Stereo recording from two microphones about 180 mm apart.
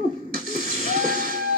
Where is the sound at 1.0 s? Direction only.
50° right (ahead or behind).